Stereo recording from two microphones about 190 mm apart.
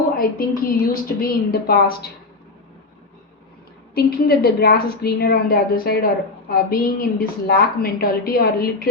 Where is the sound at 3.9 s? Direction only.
55° left (ahead or behind).